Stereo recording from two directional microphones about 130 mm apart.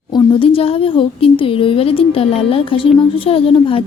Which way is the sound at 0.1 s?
40° left (ahead or behind).